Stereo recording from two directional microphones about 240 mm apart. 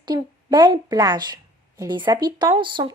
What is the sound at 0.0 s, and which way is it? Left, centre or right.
A woman's voice, centre.